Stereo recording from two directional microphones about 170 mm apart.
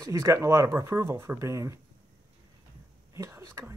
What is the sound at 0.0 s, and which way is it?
Speech, 15° right (ahead or behind).